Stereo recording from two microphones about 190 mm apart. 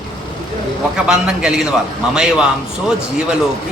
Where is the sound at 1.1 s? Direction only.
5° right (ahead or behind).